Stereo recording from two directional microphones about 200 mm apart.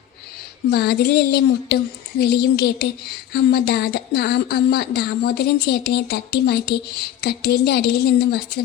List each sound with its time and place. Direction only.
0.7 s a woman's voice: 55° left (ahead or behind)